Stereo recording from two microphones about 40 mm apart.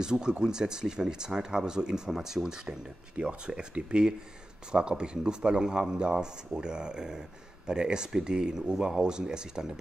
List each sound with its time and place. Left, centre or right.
0.0 s speech: centre